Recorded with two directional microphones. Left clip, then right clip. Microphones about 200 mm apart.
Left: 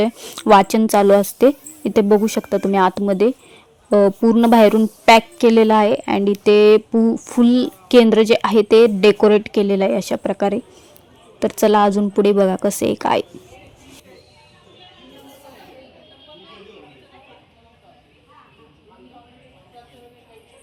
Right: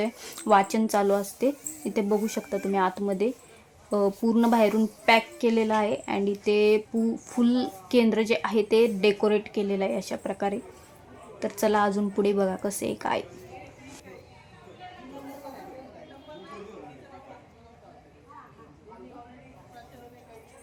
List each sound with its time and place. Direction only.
0.0 s speech: 35° left (ahead or behind)
0.4 s speech: 45° left (ahead or behind)